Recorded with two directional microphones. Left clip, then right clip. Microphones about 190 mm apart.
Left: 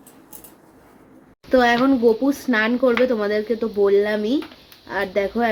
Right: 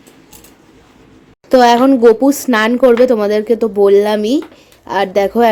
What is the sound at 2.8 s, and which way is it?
Speech, 20° right (ahead or behind).